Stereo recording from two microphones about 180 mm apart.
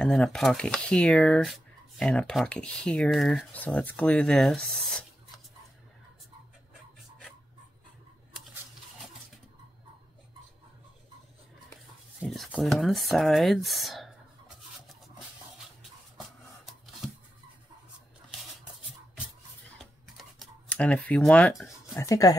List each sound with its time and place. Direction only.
0.0 s speech: 5° left (ahead or behind)
12.2 s speech: 5° right (ahead or behind)
16.2 s a sound: centre (ahead or behind)
19.8 s computer keyboard: centre (ahead or behind)
21.9 s speech: 20° left (ahead or behind)